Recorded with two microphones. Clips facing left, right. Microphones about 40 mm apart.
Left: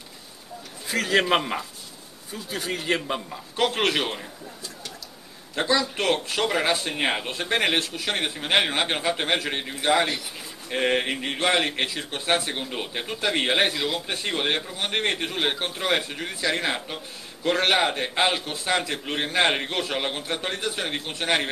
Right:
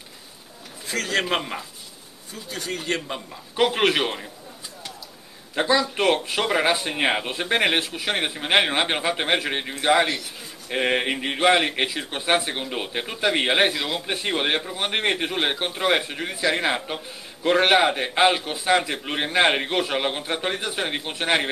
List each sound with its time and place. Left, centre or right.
0.8 s a man's voice: centre
3.5 s speech: centre
5.5 s speech: centre